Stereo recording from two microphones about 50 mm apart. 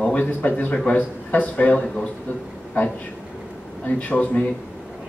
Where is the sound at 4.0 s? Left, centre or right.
Left.